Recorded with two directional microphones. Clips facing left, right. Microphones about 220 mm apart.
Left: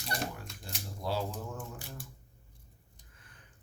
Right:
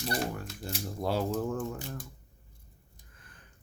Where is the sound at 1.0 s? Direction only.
55° right (ahead or behind).